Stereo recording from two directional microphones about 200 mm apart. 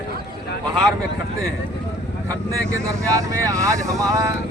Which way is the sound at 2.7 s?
15° right (ahead or behind).